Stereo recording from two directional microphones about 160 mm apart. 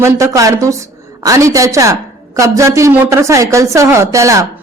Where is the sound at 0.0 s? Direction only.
20° right (ahead or behind).